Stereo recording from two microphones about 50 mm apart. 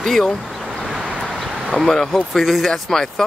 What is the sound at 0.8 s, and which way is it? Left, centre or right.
Vehicle, centre.